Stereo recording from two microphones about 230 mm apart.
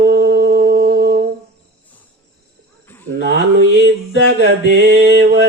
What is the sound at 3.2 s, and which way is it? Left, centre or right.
Mantra, right.